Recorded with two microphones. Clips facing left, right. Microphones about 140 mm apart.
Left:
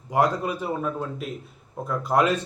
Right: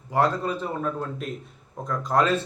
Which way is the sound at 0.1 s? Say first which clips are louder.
Left 1 dB; 10° left (ahead or behind).